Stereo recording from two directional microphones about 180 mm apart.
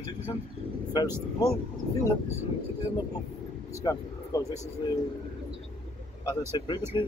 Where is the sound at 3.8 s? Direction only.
20° left (ahead or behind).